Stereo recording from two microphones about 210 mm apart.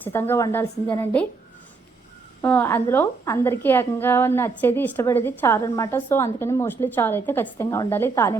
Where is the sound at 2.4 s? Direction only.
10° left (ahead or behind).